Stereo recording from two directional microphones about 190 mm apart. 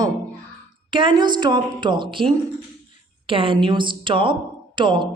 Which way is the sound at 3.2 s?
30° right (ahead or behind).